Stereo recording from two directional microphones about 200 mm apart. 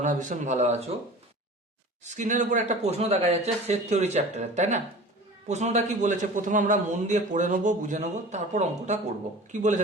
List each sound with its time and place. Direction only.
0.0 s a man's voice: 40° right (ahead or behind)
2.0 s a man's voice: 35° right (ahead or behind)